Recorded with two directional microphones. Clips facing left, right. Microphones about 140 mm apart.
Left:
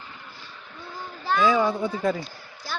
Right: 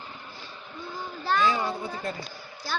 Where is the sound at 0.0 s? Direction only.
25° right (ahead or behind).